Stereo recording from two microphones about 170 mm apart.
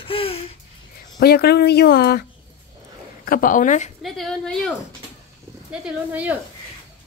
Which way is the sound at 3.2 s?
55° left (ahead or behind).